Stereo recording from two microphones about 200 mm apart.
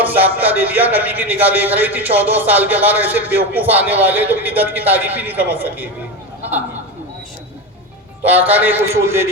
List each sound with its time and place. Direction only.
0.0 s speech: 10° right (ahead or behind)
8.2 s speech: 10° right (ahead or behind)